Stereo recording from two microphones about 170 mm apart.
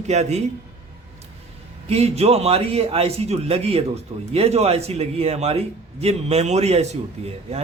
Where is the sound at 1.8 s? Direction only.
35° right (ahead or behind).